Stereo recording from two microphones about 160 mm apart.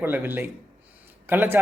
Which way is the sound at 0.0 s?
10° right (ahead or behind).